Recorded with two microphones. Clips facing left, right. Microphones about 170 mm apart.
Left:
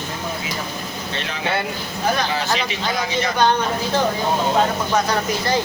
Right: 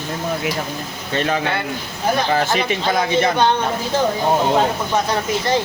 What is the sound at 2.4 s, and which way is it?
Speech, 50° right (ahead or behind).